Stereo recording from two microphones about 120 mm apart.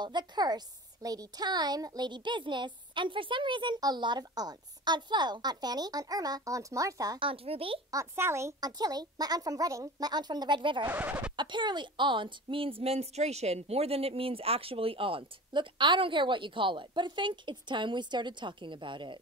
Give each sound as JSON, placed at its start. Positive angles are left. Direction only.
{"t": 0.0, "sound": "a woman's voice", "side_deg": -35}
{"t": 7.2, "sound": "speech", "side_deg": -50}
{"t": 7.9, "sound": "speech", "side_deg": -25}
{"t": 8.6, "sound": "a woman's voice", "side_deg": -35}
{"t": 10.9, "sound": "speech", "side_deg": -10}
{"t": 11.3, "sound": "speech", "side_deg": -40}